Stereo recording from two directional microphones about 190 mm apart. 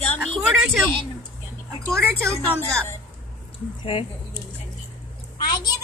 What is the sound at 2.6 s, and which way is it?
Speech, 10° left (ahead or behind).